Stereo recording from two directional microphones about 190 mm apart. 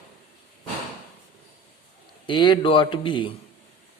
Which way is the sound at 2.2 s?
25° left (ahead or behind).